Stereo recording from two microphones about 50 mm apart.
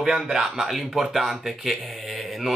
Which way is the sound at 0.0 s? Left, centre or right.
Centre.